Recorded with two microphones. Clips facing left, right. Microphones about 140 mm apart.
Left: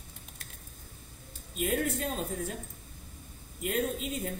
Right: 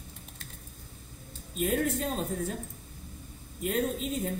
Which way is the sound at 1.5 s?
40° right (ahead or behind).